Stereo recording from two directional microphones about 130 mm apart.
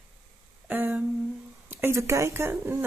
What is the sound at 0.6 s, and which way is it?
Humming, 15° right (ahead or behind).